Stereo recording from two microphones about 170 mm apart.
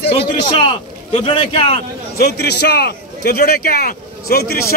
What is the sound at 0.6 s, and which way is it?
Speech, 30° left (ahead or behind).